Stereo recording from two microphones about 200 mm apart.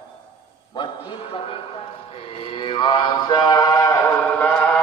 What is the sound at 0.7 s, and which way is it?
Speech, 25° left (ahead or behind).